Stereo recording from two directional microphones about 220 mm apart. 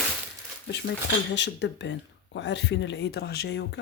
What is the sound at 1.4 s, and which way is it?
Speech, 55° left (ahead or behind).